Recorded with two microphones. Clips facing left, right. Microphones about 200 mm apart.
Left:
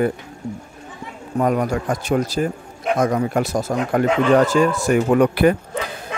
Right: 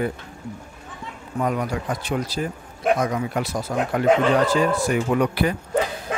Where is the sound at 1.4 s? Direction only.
45° left (ahead or behind).